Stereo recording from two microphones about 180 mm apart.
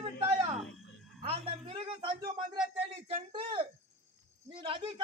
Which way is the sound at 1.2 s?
30° right (ahead or behind).